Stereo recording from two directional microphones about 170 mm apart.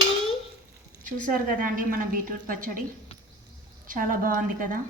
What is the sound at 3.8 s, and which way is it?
Speech, 55° right (ahead or behind).